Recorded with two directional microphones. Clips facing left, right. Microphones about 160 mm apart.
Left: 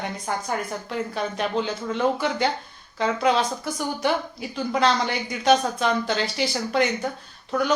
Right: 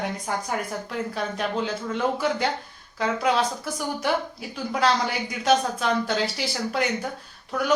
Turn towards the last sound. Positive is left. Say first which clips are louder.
# left 2 dB
turn(degrees=-5)  # may be behind; listen again after turning